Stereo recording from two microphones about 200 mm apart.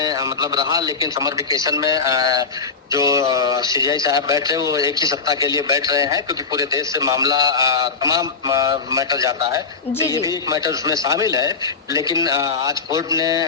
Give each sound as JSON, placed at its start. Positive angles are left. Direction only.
{"t": 0.0, "sound": "a man's voice", "side_deg": -20}